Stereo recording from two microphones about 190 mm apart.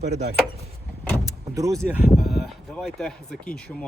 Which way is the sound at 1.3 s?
20° right (ahead or behind).